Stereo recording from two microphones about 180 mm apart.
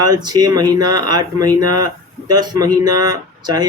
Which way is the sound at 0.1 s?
20° right (ahead or behind).